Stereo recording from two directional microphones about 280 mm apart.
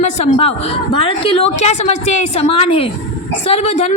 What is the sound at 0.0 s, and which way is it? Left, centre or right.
A woman's voice, left.